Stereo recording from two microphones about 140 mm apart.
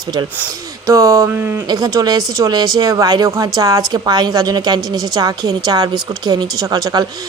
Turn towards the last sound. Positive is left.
turn(degrees=-25)  # may be behind; listen again after turning